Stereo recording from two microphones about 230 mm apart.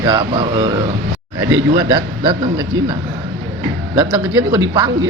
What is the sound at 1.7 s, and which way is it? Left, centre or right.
Speech, centre.